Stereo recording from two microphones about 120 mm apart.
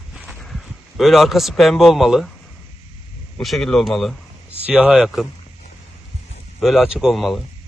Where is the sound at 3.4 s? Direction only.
Centre (ahead or behind).